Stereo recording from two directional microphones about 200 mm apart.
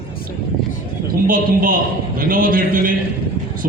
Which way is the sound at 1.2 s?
45° right (ahead or behind).